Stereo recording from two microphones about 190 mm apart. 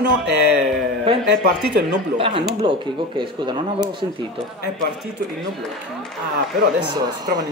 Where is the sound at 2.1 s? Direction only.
25° right (ahead or behind).